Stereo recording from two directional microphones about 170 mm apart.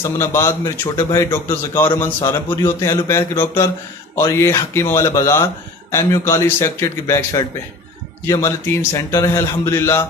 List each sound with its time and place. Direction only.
0.0 s a man's voice: 15° left (ahead or behind)